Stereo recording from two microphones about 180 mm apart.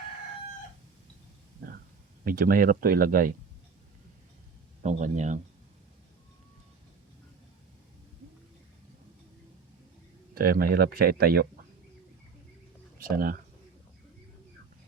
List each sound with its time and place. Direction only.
2.2 s speech: 50° right (ahead or behind)
4.8 s speech: 40° right (ahead or behind)
10.3 s speech: 55° right (ahead or behind)
13.0 s speech: 55° right (ahead or behind)